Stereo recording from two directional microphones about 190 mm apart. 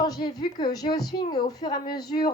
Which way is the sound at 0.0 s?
20° left (ahead or behind).